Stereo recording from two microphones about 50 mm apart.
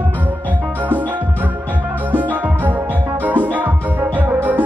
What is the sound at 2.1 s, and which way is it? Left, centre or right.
Music, right.